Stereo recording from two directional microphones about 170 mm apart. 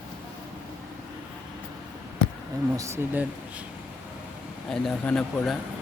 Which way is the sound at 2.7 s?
15° right (ahead or behind).